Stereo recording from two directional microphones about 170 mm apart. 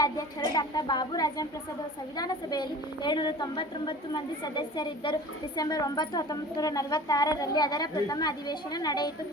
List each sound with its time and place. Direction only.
0.0 s a woman's voice: 20° left (ahead or behind)